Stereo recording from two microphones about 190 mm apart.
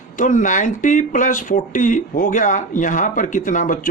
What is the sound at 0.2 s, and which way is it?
A man's voice, 40° left (ahead or behind).